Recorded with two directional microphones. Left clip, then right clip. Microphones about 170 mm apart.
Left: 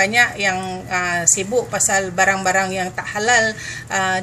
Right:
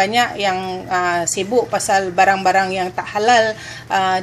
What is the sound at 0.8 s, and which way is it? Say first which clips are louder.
A woman's voice: right 1 dB; 35° right (ahead or behind).